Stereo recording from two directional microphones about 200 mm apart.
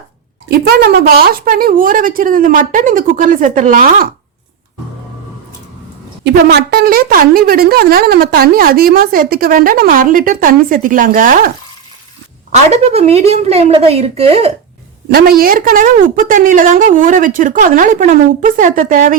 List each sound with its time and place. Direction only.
0.4 s a woman's voice: 50° right (ahead or behind)
6.2 s a woman's voice: 55° right (ahead or behind)
12.6 s a woman's voice: 30° right (ahead or behind)
15.1 s a woman's voice: 50° right (ahead or behind)